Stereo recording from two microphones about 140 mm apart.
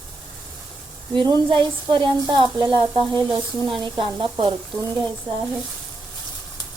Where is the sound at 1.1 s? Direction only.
35° right (ahead or behind).